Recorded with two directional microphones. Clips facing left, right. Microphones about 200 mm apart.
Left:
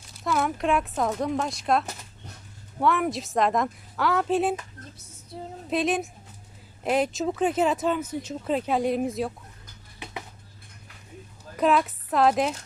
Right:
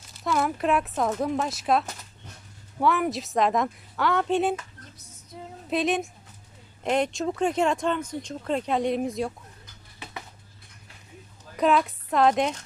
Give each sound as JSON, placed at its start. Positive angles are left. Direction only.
{"t": 0.1, "sound": "speech", "side_deg": 0}
{"t": 5.3, "sound": "a sound", "side_deg": 30}
{"t": 5.7, "sound": "speech", "side_deg": 0}
{"t": 11.5, "sound": "speech", "side_deg": 0}